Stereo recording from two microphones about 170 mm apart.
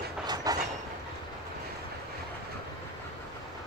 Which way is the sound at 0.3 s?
20° right (ahead or behind).